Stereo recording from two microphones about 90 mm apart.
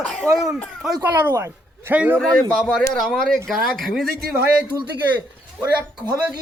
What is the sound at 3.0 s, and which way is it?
A man's voice, 5° left (ahead or behind).